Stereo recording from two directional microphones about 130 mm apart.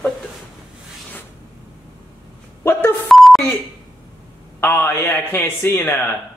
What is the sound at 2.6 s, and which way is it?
Beep, 15° left (ahead or behind).